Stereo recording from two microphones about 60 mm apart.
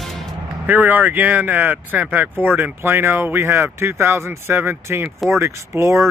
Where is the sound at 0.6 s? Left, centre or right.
Right.